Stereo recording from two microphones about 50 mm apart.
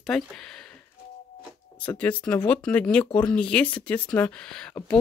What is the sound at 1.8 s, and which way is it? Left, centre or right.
Speech, left.